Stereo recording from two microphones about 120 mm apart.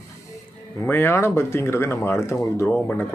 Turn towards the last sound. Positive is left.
turn(degrees=15)  # may be behind; listen again after turning